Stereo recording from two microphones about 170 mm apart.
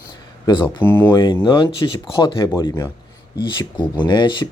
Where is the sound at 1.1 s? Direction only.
25° left (ahead or behind).